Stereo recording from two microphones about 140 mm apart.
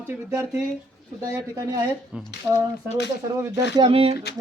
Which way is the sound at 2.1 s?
5° right (ahead or behind).